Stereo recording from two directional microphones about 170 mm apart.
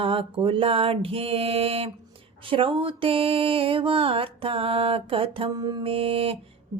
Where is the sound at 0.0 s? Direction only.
30° right (ahead or behind).